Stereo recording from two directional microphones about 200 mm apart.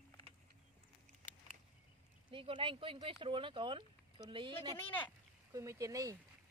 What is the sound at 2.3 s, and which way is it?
Speech, 25° right (ahead or behind).